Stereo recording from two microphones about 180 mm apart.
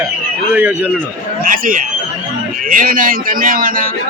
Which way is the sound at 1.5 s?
50° right (ahead or behind).